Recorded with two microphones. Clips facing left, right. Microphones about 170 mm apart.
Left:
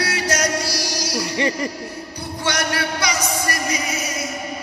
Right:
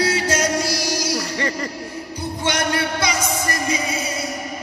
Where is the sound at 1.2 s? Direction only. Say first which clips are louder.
Left 3 dB; 15° left (ahead or behind).